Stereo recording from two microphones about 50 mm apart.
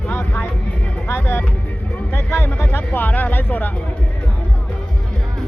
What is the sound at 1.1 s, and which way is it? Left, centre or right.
Speech, left.